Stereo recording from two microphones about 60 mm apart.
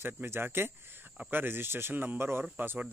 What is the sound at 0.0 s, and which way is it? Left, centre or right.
Speech, right.